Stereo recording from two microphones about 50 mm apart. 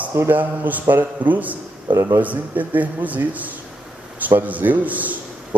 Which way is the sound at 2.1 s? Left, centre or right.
Right.